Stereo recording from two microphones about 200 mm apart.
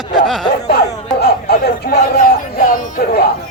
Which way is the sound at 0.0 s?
20° left (ahead or behind).